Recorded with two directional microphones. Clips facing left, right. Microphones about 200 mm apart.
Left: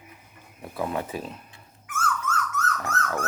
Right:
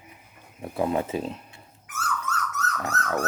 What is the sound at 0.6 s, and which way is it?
Speech, 25° right (ahead or behind).